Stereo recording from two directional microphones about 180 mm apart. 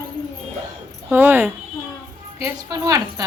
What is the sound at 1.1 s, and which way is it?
Speech, 10° right (ahead or behind).